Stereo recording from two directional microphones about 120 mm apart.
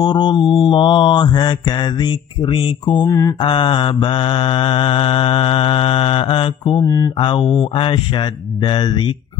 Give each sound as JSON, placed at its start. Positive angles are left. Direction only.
{"t": 0.0, "sound": "mantra", "side_deg": 35}
{"t": 3.1, "sound": "mantra", "side_deg": 30}
{"t": 3.4, "sound": "mantra", "side_deg": 45}